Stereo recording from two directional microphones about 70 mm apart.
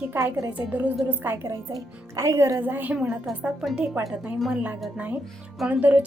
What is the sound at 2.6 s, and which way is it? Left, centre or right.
Speech, right.